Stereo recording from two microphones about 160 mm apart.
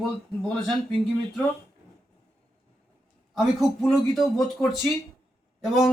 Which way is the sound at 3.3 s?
Centre (ahead or behind).